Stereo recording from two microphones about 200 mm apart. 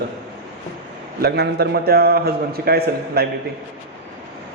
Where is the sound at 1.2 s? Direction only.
55° right (ahead or behind).